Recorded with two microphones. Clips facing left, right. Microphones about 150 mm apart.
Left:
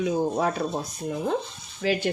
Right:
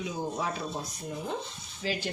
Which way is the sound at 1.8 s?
60° left (ahead or behind).